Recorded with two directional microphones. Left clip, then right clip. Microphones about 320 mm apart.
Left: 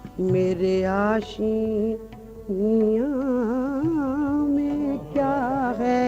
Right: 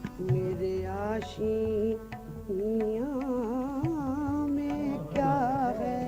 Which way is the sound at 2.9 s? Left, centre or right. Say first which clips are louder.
Left 8 dB; centre.